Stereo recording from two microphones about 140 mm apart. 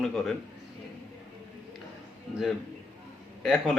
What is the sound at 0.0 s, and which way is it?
Speech, centre (ahead or behind).